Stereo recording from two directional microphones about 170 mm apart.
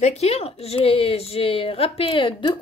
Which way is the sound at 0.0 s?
40° left (ahead or behind).